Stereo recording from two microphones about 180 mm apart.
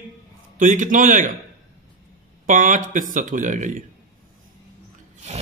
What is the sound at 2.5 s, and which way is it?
A man's voice, 45° right (ahead or behind).